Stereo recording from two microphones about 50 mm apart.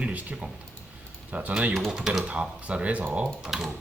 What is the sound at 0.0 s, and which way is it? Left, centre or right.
Speech, right.